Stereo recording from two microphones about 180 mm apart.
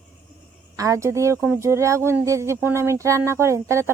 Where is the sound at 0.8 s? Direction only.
15° right (ahead or behind).